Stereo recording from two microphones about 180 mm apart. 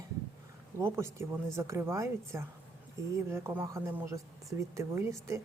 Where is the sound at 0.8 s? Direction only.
15° right (ahead or behind).